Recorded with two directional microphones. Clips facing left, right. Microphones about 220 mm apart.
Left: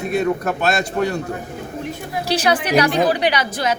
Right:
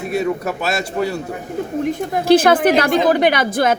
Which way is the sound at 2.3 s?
50° right (ahead or behind).